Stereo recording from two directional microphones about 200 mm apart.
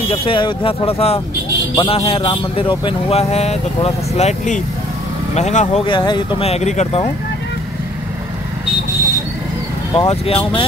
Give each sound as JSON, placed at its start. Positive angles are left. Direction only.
{"t": 0.1, "sound": "speech", "side_deg": 25}
{"t": 5.9, "sound": "speech", "side_deg": 20}
{"t": 9.9, "sound": "speech", "side_deg": 30}